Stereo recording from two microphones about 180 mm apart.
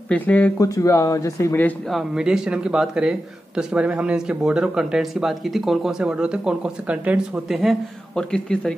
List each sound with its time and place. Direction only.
0.1 s speech: 10° left (ahead or behind)
1.9 s speech: centre (ahead or behind)